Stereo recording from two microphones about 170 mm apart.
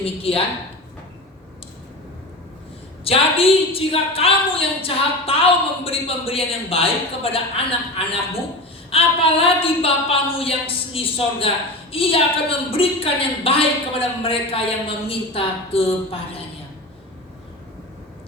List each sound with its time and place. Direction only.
0.0 s a woman's voice: 35° left (ahead or behind)
3.0 s a woman's voice: 35° left (ahead or behind)